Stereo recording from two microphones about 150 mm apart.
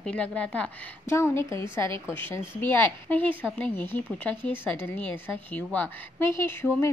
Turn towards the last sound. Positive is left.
turn(degrees=15)  # may be behind; listen again after turning